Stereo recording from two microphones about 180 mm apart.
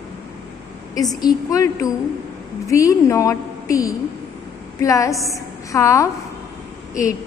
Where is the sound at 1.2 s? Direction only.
20° left (ahead or behind).